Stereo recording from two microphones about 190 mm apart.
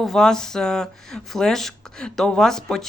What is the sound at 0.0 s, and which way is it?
Speech, centre (ahead or behind).